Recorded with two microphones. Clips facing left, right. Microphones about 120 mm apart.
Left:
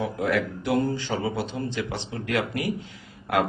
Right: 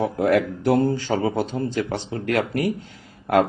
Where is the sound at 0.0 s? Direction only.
50° right (ahead or behind).